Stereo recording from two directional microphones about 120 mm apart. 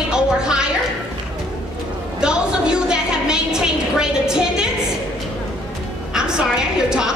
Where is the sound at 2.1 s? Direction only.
5° right (ahead or behind).